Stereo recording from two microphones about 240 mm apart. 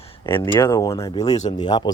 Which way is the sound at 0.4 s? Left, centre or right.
Centre.